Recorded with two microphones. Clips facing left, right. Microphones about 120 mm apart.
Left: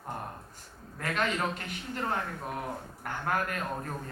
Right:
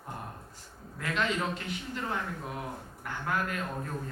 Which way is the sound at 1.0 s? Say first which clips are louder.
Even; 50° left (ahead or behind).